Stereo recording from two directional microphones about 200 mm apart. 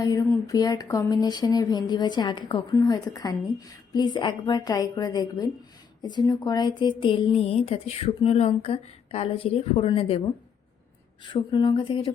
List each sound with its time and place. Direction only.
0.0 s speech: 20° left (ahead or behind)
11.3 s speech: 25° left (ahead or behind)